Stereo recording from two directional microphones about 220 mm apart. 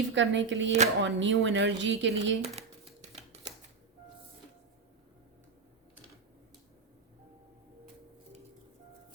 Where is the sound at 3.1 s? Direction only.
30° right (ahead or behind).